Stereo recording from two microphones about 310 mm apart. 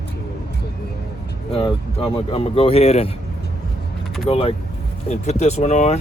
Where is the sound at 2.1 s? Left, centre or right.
Centre.